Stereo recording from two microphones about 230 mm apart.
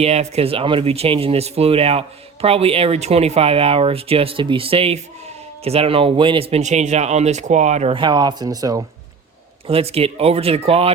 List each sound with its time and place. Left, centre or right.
0.0 s speech: right